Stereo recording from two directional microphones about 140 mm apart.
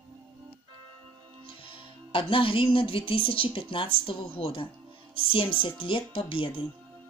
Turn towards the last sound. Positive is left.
turn(degrees=40)  # may be behind; listen again after turning